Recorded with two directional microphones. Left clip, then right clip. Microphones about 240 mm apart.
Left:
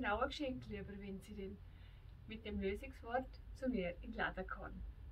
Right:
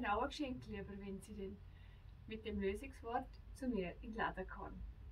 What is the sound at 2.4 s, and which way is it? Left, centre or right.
Speech, centre.